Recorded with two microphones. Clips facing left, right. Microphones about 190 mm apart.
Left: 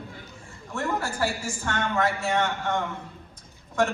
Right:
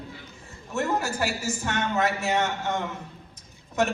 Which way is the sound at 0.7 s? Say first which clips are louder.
Right 2 dB; 20° right (ahead or behind).